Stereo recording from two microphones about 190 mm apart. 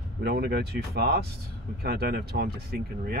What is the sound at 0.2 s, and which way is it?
Speech, 60° right (ahead or behind).